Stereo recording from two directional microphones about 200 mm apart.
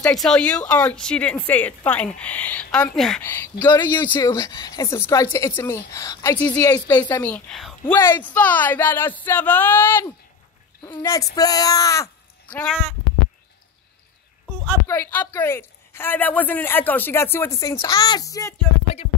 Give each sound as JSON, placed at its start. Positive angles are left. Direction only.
{"t": 0.0, "sound": "a woman's voice", "side_deg": 0}
{"t": 3.6, "sound": "a woman's voice", "side_deg": 15}
{"t": 14.9, "sound": "a woman's voice", "side_deg": 10}